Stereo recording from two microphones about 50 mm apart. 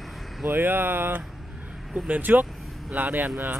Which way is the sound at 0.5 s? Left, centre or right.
Right.